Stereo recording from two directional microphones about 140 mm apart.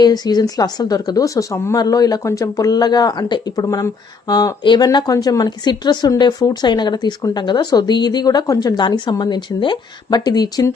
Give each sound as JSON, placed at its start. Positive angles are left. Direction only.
{"t": 0.0, "sound": "speech", "side_deg": 30}